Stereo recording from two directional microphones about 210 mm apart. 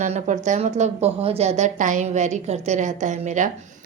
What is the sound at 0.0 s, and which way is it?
A woman's voice, 35° right (ahead or behind).